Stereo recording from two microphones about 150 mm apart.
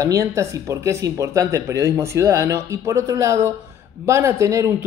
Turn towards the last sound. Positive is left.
turn(degrees=-20)  # may be behind; listen again after turning